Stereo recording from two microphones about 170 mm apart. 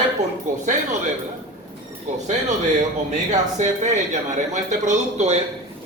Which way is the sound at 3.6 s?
45° right (ahead or behind).